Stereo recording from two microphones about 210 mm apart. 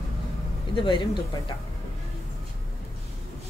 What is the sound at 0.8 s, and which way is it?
Speech, 25° left (ahead or behind).